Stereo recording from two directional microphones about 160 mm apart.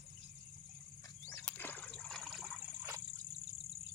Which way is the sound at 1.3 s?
10° left (ahead or behind).